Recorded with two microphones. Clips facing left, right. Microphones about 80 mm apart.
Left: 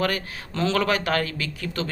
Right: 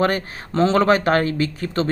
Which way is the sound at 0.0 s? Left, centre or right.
Right.